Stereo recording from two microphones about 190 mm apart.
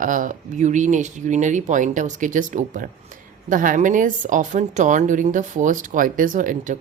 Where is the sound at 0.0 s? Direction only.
45° right (ahead or behind).